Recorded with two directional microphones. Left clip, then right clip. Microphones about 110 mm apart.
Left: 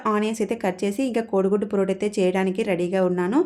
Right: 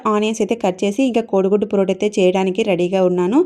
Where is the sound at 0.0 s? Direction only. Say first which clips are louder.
Right 6 dB; 30° right (ahead or behind).